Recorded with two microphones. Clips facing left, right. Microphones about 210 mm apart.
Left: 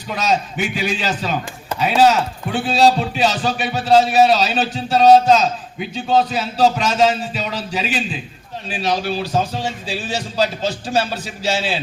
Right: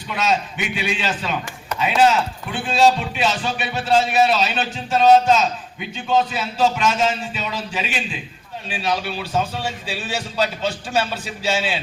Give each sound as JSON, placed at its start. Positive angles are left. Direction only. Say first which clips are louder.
{"t": 0.1, "sound": "a man's voice", "louder": "left 2 dB", "side_deg": 40}